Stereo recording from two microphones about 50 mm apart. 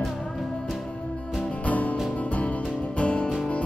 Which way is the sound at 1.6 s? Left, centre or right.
Left.